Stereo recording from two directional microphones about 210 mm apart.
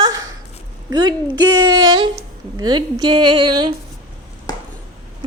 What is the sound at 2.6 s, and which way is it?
A woman's voice, 20° right (ahead or behind).